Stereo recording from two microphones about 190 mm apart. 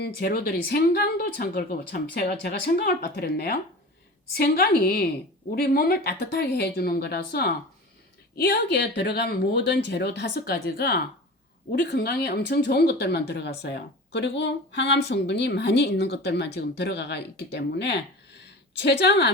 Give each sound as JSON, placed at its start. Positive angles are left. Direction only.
{"t": 0.0, "sound": "a woman's voice", "side_deg": 55}